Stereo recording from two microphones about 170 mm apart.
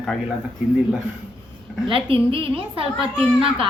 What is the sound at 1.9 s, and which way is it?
A woman's voice, 30° right (ahead or behind).